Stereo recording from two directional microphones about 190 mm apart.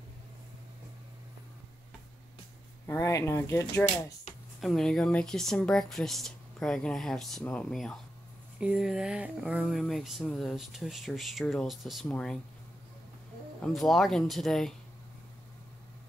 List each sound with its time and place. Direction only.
2.9 s speech: 15° left (ahead or behind)
4.6 s speech: centre (ahead or behind)
13.6 s speech: centre (ahead or behind)